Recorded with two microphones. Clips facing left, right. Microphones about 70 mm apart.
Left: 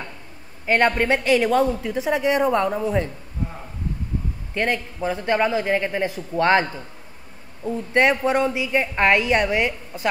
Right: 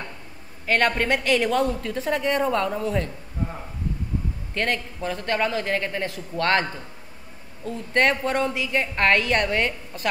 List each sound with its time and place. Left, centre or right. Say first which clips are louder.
0.7 s a woman's voice: left 3 dB; centre
4.6 s a woman's voice: left 3 dB; centre